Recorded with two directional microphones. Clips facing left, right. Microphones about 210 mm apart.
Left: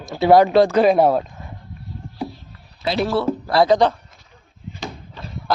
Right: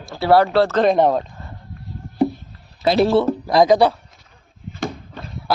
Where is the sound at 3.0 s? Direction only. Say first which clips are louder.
Right 4 dB; 20° right (ahead or behind).